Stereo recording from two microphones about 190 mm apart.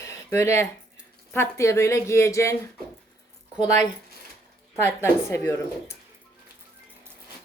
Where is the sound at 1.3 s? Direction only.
15° left (ahead or behind).